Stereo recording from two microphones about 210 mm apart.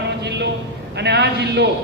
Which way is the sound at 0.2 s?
55° right (ahead or behind).